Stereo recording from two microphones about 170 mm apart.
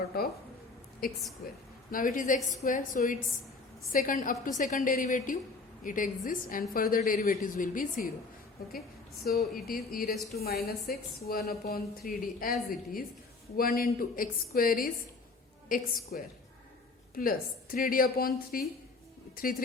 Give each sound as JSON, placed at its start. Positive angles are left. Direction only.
{"t": 0.1, "sound": "a sound", "side_deg": 65}
{"t": 1.0, "sound": "a woman's voice", "side_deg": 60}
{"t": 9.2, "sound": "a woman's voice", "side_deg": 60}
{"t": 16.1, "sound": "a woman's voice", "side_deg": 60}